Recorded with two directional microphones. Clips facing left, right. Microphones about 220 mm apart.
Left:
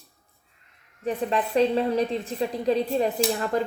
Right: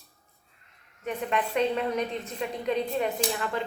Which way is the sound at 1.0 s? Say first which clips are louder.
Left 4 dB; 35° left (ahead or behind).